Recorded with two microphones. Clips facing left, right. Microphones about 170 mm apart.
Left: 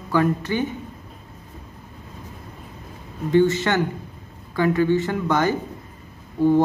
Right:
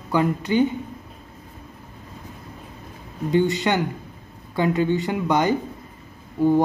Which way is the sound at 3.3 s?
15° right (ahead or behind).